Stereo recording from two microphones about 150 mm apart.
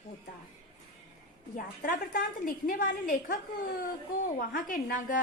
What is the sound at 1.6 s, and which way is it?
A woman's voice, 65° left (ahead or behind).